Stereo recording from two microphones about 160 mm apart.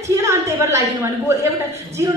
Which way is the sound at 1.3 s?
15° right (ahead or behind).